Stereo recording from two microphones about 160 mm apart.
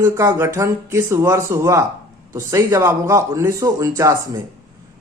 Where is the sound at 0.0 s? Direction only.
15° right (ahead or behind).